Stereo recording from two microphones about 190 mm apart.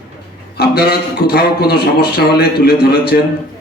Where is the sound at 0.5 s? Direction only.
55° left (ahead or behind).